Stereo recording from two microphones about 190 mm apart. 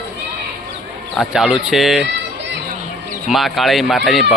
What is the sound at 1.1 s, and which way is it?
Speech, centre (ahead or behind).